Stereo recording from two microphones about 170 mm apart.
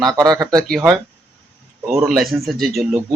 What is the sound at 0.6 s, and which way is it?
Speech, centre (ahead or behind).